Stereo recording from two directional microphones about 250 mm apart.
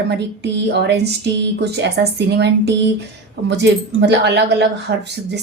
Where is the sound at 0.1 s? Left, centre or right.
Right.